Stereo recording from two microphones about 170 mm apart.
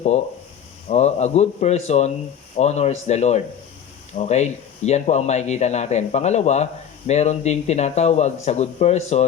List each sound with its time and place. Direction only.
0.9 s a man's voice: 40° left (ahead or behind)